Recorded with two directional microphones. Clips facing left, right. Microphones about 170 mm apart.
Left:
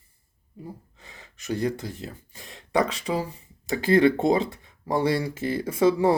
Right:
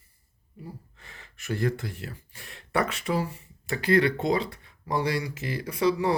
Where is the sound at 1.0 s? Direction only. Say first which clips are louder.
Left 3 dB; 20° left (ahead or behind).